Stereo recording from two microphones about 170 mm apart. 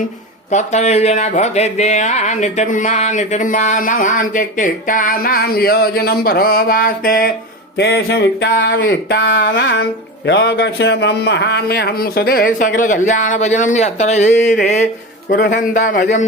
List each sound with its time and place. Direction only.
0.5 s speech: 40° left (ahead or behind)
7.8 s a sound: 85° left; by 14.8 s 45° left (ahead or behind)
15.3 s speech: 55° left (ahead or behind)